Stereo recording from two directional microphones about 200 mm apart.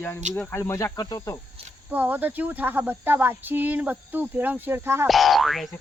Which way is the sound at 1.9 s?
10° right (ahead or behind).